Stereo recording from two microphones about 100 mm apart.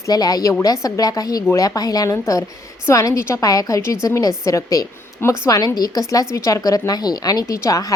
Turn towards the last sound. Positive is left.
turn(degrees=35)  # may be behind; listen again after turning